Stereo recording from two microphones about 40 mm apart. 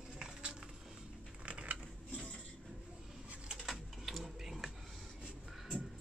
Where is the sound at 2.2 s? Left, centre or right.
Centre.